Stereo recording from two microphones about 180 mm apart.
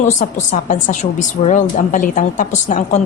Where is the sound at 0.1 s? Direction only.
45° left (ahead or behind).